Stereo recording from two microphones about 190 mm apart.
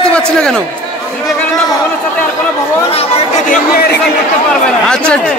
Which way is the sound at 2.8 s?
30° left (ahead or behind).